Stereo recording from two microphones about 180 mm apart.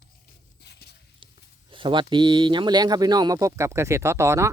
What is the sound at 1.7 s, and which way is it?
Speech, 25° right (ahead or behind).